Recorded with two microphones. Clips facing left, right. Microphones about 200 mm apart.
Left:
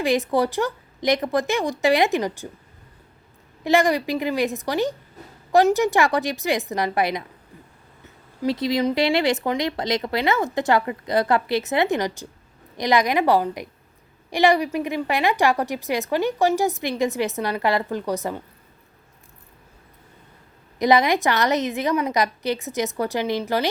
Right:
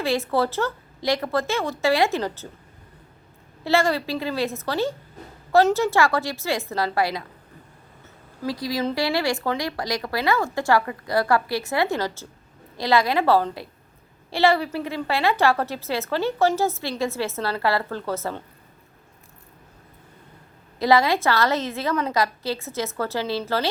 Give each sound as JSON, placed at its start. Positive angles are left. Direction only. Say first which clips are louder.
{"t": 0.0, "sound": "a woman's voice", "louder": "left 2 dB", "side_deg": 15}
{"t": 3.6, "sound": "a woman's voice", "louder": "left 2 dB", "side_deg": 15}
{"t": 8.4, "sound": "a woman's voice", "louder": "left 4 dB", "side_deg": 25}
{"t": 20.7, "sound": "a woman's voice", "louder": "left 1 dB", "side_deg": 20}